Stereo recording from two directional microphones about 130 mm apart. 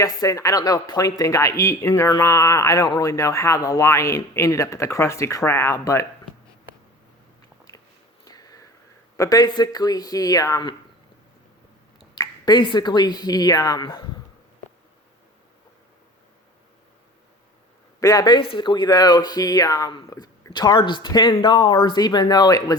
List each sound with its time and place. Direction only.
0.0 s speech: 25° left (ahead or behind)
8.2 s a sound: 30° left (ahead or behind)
9.1 s speech: 25° left (ahead or behind)
12.1 s speech: 35° left (ahead or behind)
18.0 s speech: 30° left (ahead or behind)
18.3 s speech: 40° left (ahead or behind)